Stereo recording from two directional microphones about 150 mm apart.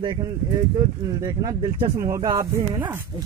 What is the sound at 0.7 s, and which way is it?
Speech, 25° right (ahead or behind).